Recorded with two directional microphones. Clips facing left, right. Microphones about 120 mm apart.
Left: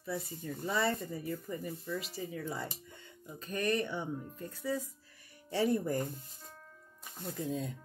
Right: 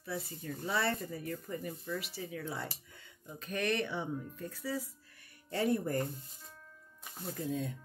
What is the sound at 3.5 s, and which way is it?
Speech, 80° right.